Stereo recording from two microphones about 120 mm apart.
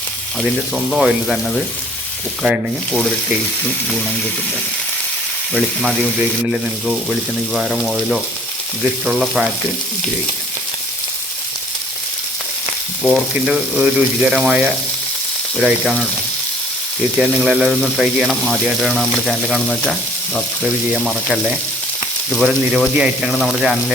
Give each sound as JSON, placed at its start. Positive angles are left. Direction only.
{"t": 0.3, "sound": "speech", "side_deg": 0}
{"t": 7.5, "sound": "speech", "side_deg": 0}
{"t": 13.1, "sound": "speech", "side_deg": -5}
{"t": 17.2, "sound": "speech", "side_deg": -5}